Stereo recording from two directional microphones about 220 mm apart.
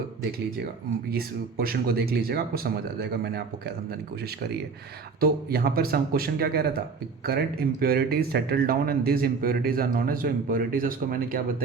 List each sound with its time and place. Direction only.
1.1 s speech: 45° right (ahead or behind)
5.2 s speech: 45° right (ahead or behind)